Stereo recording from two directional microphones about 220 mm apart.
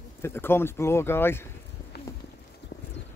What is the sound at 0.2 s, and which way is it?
Speech, 10° left (ahead or behind).